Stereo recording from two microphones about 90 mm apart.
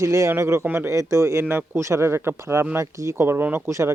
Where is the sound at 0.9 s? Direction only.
35° right (ahead or behind).